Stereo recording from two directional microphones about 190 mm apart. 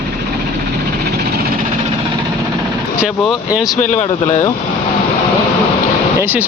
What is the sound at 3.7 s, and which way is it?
Speech, 40° left (ahead or behind).